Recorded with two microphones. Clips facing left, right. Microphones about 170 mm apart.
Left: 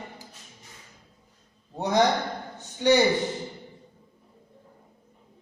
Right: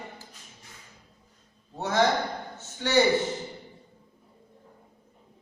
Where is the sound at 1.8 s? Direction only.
15° left (ahead or behind).